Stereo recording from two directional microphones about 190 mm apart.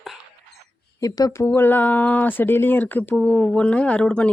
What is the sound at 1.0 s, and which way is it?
Speech, 20° left (ahead or behind).